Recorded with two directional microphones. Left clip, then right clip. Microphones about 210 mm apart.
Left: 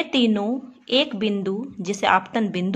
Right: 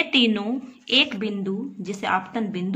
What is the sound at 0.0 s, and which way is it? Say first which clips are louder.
Speech: right 1 dB; 35° left (ahead or behind).